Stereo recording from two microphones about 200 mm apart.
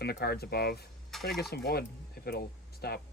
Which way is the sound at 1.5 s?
55° left (ahead or behind).